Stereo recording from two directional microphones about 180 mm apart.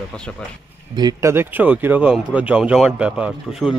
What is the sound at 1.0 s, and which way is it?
A man's voice, 20° right (ahead or behind).